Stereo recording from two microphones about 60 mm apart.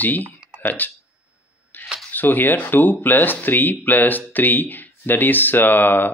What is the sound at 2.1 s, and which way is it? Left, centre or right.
Speech, left.